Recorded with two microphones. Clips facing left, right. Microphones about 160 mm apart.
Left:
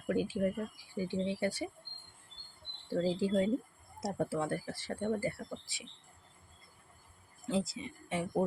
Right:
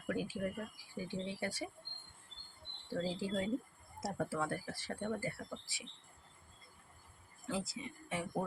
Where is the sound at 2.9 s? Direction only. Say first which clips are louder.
Left 7 dB; 25° left (ahead or behind).